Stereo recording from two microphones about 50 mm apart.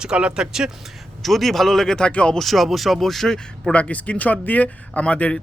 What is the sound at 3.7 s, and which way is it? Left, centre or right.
Speech, left.